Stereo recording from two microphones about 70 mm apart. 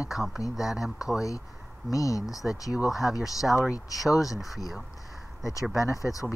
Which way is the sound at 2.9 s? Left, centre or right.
Centre.